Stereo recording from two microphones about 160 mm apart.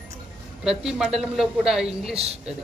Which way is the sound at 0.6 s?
5° right (ahead or behind).